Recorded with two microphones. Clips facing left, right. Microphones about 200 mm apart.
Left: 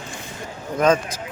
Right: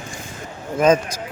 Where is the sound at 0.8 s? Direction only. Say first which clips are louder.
Right 2 dB; 10° right (ahead or behind).